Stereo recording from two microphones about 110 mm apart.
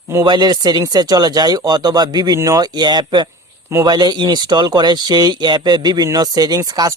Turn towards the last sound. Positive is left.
turn(degrees=-35)  # may be behind; listen again after turning